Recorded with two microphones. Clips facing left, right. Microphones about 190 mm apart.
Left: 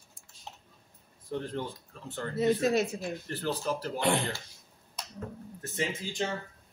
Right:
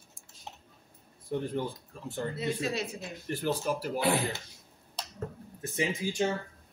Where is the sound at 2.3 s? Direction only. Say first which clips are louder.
Left 9 dB; 45° left (ahead or behind).